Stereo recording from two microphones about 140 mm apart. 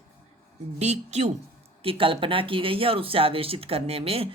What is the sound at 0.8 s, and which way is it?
Speech, 50° right (ahead or behind).